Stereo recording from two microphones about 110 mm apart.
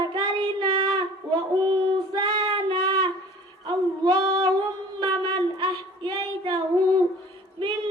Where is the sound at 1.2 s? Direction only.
35° right (ahead or behind).